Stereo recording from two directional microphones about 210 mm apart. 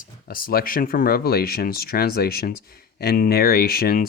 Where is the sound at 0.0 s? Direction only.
45° left (ahead or behind).